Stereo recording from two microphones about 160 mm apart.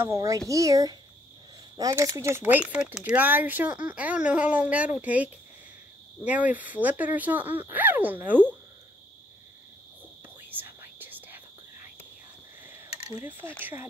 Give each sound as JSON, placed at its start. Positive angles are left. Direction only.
{"t": 0.0, "sound": "speech", "side_deg": -20}
{"t": 10.5, "sound": "whispering", "side_deg": -10}
{"t": 13.1, "sound": "speech", "side_deg": -15}